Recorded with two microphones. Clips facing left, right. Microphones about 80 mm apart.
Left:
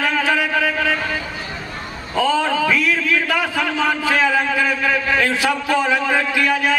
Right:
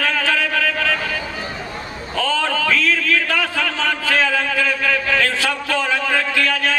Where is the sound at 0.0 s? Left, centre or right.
Centre.